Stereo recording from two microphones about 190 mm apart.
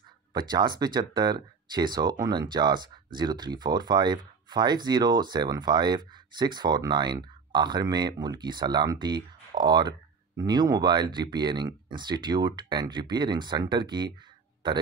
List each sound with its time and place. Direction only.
0.3 s speech: 20° right (ahead or behind)